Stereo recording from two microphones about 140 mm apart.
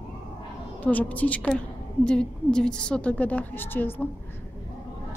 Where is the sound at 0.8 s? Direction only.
10° left (ahead or behind).